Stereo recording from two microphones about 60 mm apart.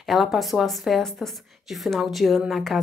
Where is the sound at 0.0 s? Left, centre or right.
Centre.